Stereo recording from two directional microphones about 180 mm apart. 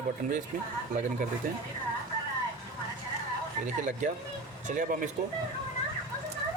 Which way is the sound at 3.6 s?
45° right (ahead or behind).